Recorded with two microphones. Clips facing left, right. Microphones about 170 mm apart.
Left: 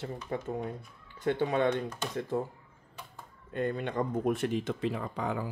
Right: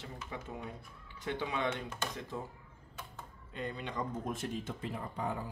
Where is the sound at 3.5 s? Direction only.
55° left (ahead or behind).